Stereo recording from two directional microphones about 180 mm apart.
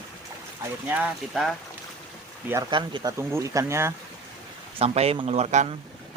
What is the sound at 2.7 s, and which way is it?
Speech, 25° right (ahead or behind).